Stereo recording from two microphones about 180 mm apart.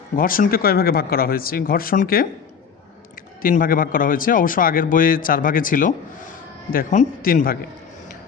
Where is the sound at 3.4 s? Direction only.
50° left (ahead or behind).